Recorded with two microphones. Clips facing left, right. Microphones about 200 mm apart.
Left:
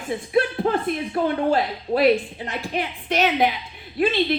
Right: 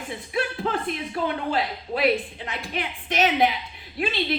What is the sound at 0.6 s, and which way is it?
A woman's voice, 45° left (ahead or behind).